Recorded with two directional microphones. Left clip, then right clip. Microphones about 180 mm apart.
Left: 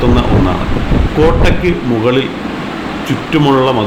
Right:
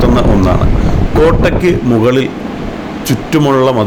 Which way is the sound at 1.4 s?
40° right (ahead or behind).